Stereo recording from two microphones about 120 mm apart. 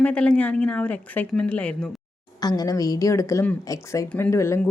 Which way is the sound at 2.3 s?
35° left (ahead or behind).